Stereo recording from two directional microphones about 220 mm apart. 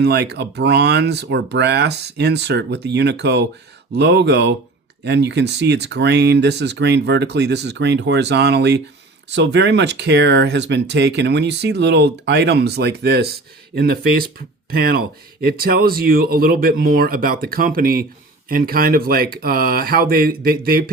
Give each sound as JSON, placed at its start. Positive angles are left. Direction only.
{"t": 0.0, "sound": "speech", "side_deg": -50}